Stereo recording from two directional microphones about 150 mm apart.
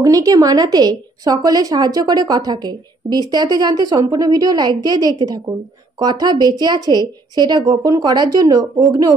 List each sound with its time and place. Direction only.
0.0 s a woman's voice: 25° right (ahead or behind)